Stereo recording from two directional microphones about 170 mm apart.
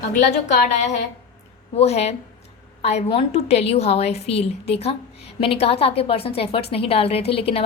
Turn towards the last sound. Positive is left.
turn(degrees=35)  # may be behind; listen again after turning